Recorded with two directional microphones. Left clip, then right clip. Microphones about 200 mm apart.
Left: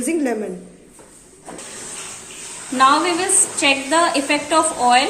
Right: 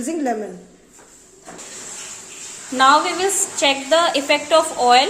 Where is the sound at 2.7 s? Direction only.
55° right (ahead or behind).